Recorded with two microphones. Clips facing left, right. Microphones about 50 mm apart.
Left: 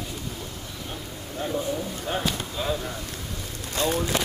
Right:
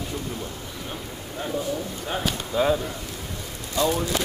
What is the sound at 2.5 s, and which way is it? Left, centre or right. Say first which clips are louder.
Speech: right 11 dB; right.